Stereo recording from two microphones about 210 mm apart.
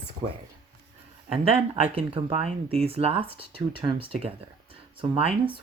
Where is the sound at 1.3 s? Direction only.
30° right (ahead or behind).